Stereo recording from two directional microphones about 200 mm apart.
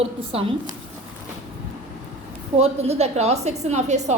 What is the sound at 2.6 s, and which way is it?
A woman's voice, 30° right (ahead or behind).